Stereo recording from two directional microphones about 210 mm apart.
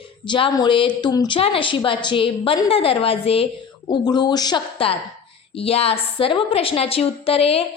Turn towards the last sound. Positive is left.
turn(degrees=30)  # may be behind; listen again after turning